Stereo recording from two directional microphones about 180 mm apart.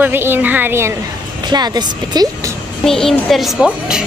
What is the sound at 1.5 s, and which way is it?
Speech, 25° right (ahead or behind).